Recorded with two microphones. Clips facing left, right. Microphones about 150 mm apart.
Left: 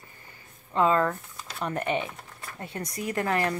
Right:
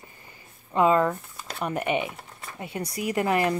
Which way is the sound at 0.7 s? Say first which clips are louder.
Right 2 dB; 15° right (ahead or behind).